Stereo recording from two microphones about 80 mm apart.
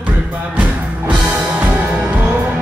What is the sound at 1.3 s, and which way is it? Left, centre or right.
Music, centre.